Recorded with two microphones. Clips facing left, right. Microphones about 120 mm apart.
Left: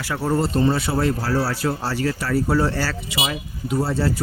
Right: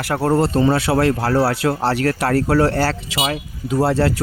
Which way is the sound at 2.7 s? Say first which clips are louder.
Right 6 dB; 55° right (ahead or behind).